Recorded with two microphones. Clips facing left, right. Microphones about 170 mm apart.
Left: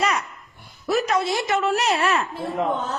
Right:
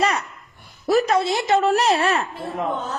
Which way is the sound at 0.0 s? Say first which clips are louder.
Right 2 dB; 30° right (ahead or behind).